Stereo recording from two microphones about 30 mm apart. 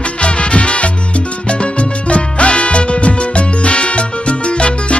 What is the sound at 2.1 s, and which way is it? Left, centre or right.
Music, left.